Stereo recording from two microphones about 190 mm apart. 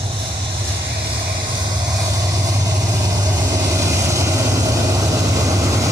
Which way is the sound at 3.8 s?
15° right (ahead or behind).